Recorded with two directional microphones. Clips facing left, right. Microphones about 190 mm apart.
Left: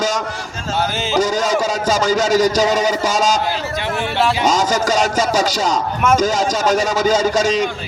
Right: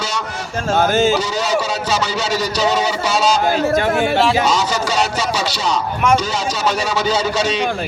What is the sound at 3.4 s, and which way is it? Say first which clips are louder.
Speech: right 6 dB; 45° right (ahead or behind).